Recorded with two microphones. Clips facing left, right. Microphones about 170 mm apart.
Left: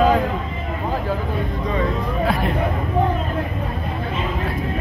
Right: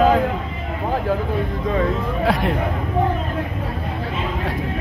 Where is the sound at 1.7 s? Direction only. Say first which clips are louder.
Right 2 dB; 70° right (ahead or behind); by 2.5 s 85° right.